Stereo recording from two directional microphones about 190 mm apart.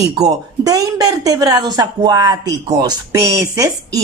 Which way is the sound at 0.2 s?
20° right (ahead or behind).